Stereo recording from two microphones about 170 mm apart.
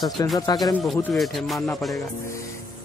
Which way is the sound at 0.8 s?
Centre (ahead or behind).